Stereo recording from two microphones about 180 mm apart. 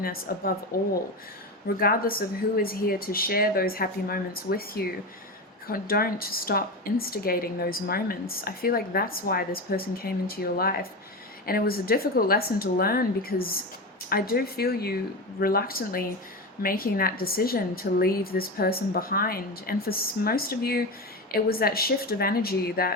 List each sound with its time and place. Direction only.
0.0 s a woman's voice: 55° left (ahead or behind)